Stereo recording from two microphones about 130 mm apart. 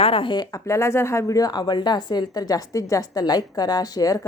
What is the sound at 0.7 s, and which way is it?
A woman's voice, 20° left (ahead or behind).